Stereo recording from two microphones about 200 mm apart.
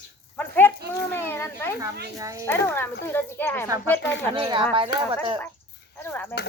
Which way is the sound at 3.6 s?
15° right (ahead or behind).